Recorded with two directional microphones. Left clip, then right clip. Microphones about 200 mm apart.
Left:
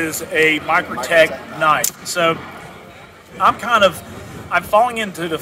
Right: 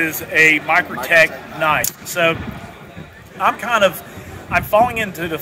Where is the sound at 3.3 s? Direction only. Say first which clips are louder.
Left 2 dB; centre (ahead or behind).